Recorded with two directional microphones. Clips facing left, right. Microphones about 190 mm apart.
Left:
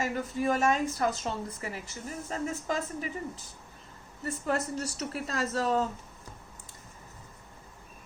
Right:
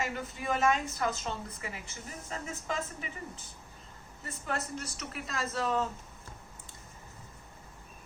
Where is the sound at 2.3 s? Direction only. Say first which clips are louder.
Left 5 dB; 40° left (ahead or behind).